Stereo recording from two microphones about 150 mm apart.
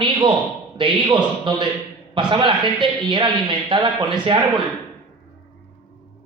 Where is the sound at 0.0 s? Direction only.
30° right (ahead or behind).